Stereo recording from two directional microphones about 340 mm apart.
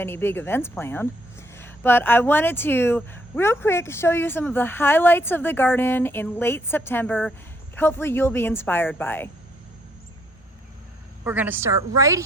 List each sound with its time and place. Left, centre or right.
0.0 s a woman's voice: centre
11.2 s a woman's voice: centre